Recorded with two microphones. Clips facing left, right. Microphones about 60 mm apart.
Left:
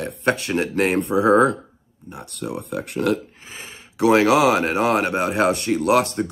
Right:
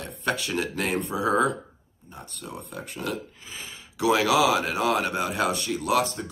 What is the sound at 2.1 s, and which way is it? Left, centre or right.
Speech, left.